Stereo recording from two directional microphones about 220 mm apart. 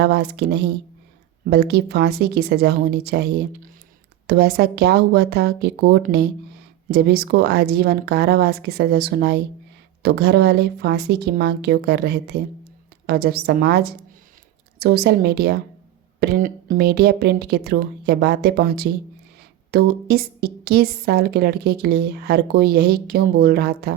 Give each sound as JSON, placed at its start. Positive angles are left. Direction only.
{"t": 0.0, "sound": "a woman's voice", "side_deg": -50}